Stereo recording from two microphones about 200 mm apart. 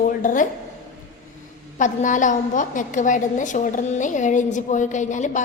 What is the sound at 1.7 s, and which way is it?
A woman's voice, 40° left (ahead or behind).